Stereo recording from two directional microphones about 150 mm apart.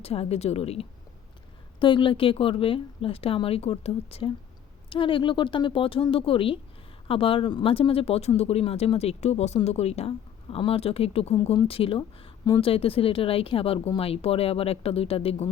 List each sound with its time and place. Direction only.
0.0 s speech: 40° left (ahead or behind)